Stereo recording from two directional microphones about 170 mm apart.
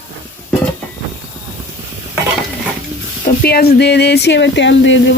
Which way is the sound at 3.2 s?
65° left (ahead or behind).